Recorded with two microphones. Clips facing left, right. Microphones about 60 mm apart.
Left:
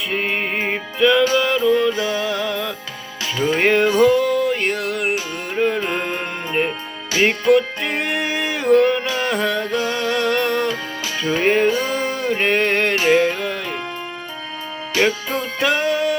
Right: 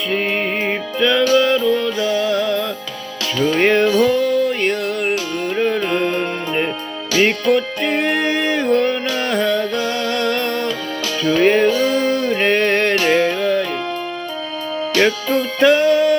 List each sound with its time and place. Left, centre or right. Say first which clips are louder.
0.1 s music: right 3 dB; centre
1.2 s music: right 3 dB; left
3.6 s music: right 2 dB; centre
3.8 s music: even; left
4.4 s music: right 2 dB; centre
5.5 s music: right 1 dB; centre
7.5 s music: even; centre
9.0 s music: right 1 dB; left
9.3 s music: right 5 dB; centre
9.7 s music: even; centre
11.2 s music: right 3 dB; left
13.0 s music: right 1 dB; left
14.9 s music: right 3 dB; centre